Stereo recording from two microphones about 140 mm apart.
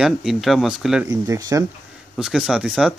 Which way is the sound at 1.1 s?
25° right (ahead or behind).